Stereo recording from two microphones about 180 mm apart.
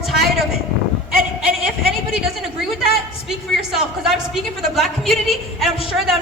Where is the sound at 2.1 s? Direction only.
5° right (ahead or behind).